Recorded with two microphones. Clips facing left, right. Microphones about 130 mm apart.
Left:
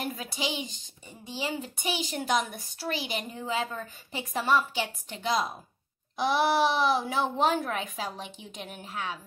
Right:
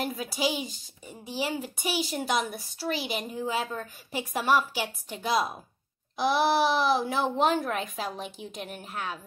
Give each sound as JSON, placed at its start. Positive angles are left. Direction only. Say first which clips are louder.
{"t": 0.0, "sound": "a woman's voice", "louder": "right 4 dB", "side_deg": -5}